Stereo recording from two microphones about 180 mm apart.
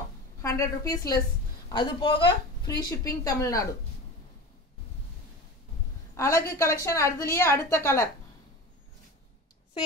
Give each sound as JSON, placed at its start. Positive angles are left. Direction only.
{"t": 0.4, "sound": "a woman's voice", "side_deg": 20}
{"t": 6.1, "sound": "a woman's voice", "side_deg": 15}